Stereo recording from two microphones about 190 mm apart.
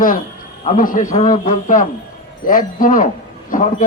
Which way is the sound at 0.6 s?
40° left (ahead or behind).